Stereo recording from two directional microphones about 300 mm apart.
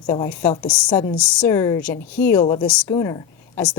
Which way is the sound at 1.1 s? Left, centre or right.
Centre.